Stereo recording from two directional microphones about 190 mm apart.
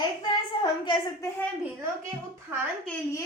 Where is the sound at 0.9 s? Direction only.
15° left (ahead or behind).